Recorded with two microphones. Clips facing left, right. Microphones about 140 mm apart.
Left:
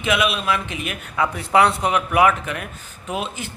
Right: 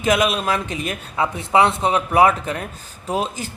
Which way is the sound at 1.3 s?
25° right (ahead or behind).